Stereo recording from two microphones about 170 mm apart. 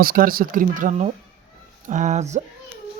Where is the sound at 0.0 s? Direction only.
55° right (ahead or behind).